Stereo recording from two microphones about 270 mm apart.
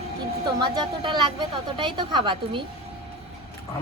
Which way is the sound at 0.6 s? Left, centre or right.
Centre.